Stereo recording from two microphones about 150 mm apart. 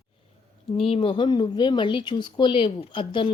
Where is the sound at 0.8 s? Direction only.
40° left (ahead or behind).